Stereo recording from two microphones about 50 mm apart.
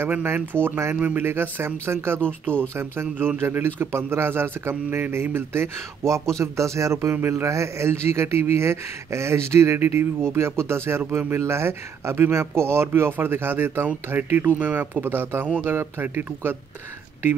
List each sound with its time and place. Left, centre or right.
0.2 s a man's voice: right
6.0 s a man's voice: right
7.2 s a man's voice: right